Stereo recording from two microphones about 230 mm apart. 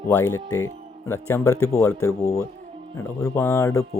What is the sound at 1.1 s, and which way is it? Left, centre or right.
Speech, centre.